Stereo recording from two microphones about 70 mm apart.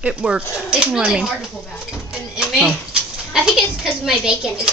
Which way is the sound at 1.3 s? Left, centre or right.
Centre.